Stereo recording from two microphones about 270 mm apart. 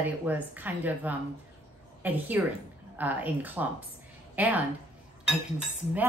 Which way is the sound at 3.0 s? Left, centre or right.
Centre.